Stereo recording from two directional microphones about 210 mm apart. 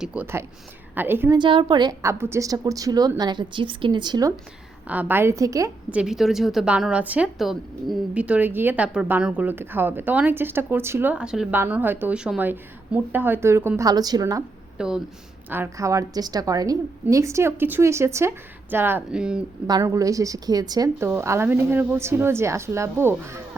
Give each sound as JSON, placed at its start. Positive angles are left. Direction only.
{"t": 0.0, "sound": "a woman's voice", "side_deg": -5}
{"t": 1.4, "sound": "a woman's voice", "side_deg": -25}
{"t": 14.8, "sound": "a woman's voice", "side_deg": -5}
{"t": 19.6, "sound": "a woman's voice", "side_deg": -15}